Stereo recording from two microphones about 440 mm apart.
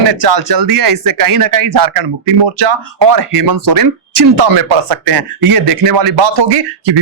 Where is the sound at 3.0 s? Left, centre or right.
Right.